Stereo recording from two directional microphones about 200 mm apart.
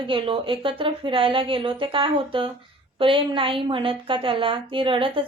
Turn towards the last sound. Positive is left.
turn(degrees=-25)  # may be behind; listen again after turning